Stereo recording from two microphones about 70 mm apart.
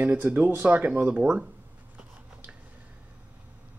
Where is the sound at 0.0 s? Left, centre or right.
Right.